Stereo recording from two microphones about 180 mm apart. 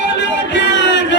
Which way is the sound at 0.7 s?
80° left.